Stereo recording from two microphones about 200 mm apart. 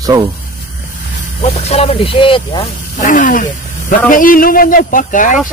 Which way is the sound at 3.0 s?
40° left (ahead or behind).